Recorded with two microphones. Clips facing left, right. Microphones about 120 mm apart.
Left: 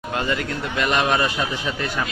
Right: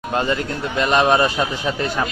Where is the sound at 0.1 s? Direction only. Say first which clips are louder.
Right 3 dB; 30° right (ahead or behind).